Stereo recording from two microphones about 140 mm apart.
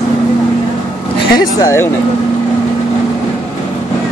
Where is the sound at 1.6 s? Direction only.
20° left (ahead or behind).